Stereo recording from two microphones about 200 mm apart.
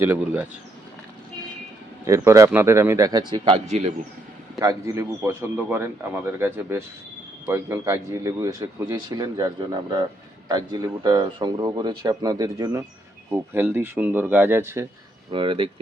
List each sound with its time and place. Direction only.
0.0 s a man's voice: 5° right (ahead or behind)
2.0 s a man's voice: 15° right (ahead or behind); by 3.9 s 35° right (ahead or behind)
4.6 s a man's voice: 15° right (ahead or behind)
10.5 s a man's voice: 20° right (ahead or behind)
15.3 s speech: 25° right (ahead or behind)